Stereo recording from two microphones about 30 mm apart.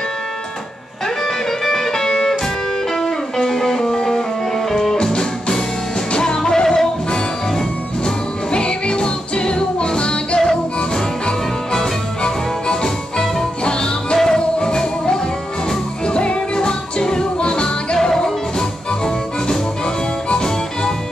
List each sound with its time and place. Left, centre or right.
1.0 s music: centre
3.3 s music: centre; by 10.4 s left
12.8 s music: centre
16.1 s music: left
18.1 s music: centre